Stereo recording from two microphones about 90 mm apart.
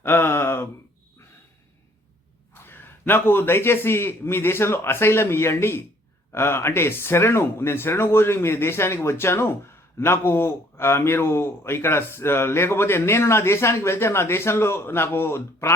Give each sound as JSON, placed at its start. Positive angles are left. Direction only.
{"t": 0.0, "sound": "gasp", "side_deg": 25}
{"t": 2.6, "sound": "speech", "side_deg": 25}